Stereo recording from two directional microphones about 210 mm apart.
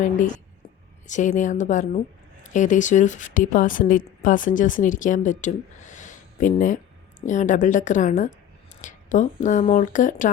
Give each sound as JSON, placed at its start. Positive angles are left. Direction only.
{"t": 1.0, "sound": "speech", "side_deg": 35}